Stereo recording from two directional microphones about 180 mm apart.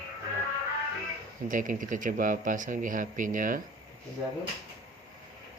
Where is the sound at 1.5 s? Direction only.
45° right (ahead or behind).